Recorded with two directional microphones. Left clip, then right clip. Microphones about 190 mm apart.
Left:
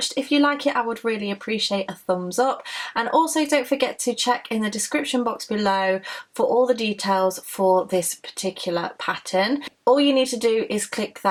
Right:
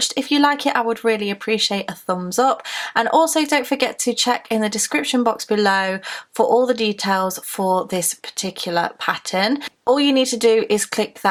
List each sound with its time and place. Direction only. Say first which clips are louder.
0.1 s speech: right 3 dB; 30° right (ahead or behind)